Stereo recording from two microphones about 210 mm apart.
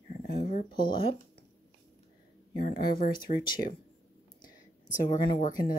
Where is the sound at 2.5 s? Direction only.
45° left (ahead or behind).